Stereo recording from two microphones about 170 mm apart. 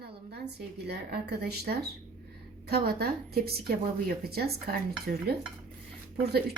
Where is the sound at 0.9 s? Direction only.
70° right (ahead or behind).